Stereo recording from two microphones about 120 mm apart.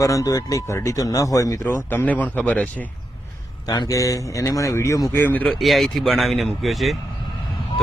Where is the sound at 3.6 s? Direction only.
35° left (ahead or behind).